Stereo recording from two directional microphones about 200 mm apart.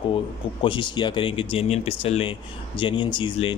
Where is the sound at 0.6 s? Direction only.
25° left (ahead or behind).